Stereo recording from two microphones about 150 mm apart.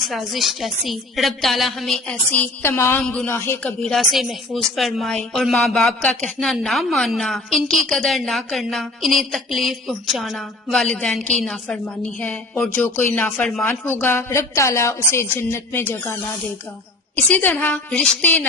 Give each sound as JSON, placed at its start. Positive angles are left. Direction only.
{"t": 0.1, "sound": "speech", "side_deg": 0}
{"t": 17.3, "sound": "speech", "side_deg": 10}